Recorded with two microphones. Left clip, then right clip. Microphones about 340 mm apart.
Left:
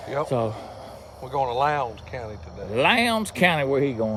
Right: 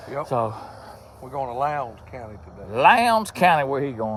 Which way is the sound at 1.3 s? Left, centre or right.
Left.